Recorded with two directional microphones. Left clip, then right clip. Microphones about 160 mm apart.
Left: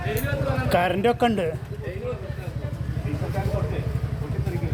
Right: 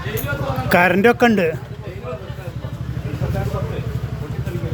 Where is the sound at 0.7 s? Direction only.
50° right (ahead or behind).